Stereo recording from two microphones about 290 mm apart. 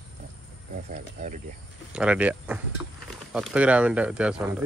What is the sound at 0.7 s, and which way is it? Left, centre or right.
Speech, right.